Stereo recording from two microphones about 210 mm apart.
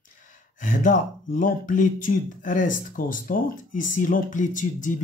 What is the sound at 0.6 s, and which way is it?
Speech, 40° left (ahead or behind).